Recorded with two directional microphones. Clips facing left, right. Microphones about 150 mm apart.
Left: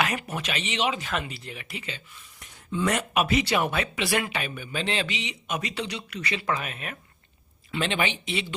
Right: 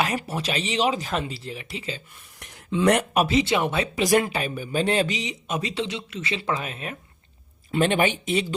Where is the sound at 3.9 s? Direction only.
40° right (ahead or behind).